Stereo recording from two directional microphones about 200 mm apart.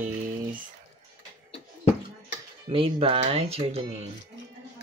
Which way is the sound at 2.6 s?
25° right (ahead or behind).